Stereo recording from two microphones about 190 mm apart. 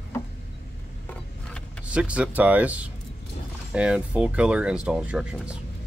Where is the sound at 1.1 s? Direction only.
5° left (ahead or behind).